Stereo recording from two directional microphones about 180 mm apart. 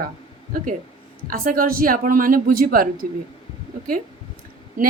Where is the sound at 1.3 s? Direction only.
50° right (ahead or behind).